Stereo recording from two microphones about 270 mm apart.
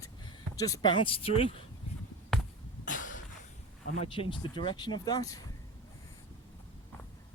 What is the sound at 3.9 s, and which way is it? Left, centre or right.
Speech, left.